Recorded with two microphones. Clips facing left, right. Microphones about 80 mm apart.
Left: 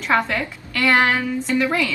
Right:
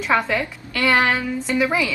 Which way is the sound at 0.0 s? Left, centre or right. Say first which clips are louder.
Even; centre.